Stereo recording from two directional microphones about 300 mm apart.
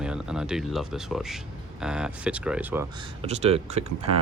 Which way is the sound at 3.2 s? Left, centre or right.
Centre.